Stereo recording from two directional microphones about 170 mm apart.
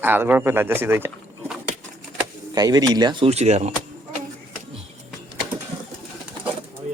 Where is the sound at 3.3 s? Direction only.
40° right (ahead or behind).